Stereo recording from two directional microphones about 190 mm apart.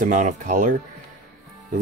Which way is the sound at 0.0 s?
40° right (ahead or behind).